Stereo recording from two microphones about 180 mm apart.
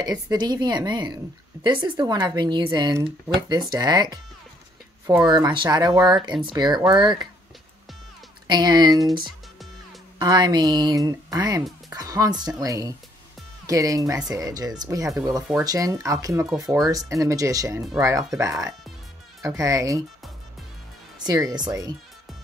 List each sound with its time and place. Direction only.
0.0 s a woman's voice: 20° right (ahead or behind)
5.2 s a woman's voice: 25° right (ahead or behind)
8.5 s a woman's voice: 20° right (ahead or behind)
10.1 s a woman's voice: 25° right (ahead or behind)
21.3 s a woman's voice: 20° right (ahead or behind)